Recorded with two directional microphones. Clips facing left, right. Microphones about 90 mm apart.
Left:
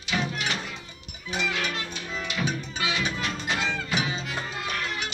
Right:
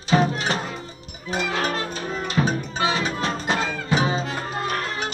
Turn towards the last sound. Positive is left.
turn(degrees=-40)  # may be behind; listen again after turning